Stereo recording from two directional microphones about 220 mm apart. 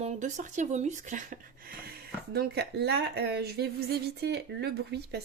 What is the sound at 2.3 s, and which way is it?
Speech, 50° right (ahead or behind).